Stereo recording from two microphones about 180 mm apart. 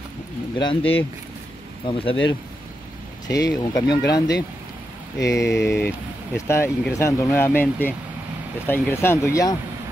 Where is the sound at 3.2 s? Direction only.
20° left (ahead or behind).